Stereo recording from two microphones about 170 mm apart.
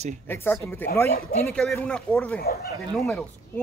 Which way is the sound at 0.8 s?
10° left (ahead or behind).